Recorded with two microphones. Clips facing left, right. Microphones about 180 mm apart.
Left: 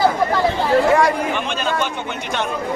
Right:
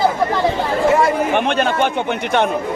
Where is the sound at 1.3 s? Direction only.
60° right (ahead or behind).